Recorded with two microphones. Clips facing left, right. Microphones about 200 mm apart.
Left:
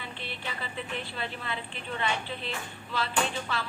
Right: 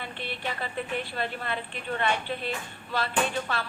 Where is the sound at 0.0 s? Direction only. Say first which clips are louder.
Right 4 dB; 60° right (ahead or behind).